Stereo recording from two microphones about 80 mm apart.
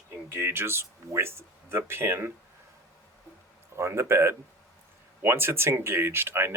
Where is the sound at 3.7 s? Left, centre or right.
Right.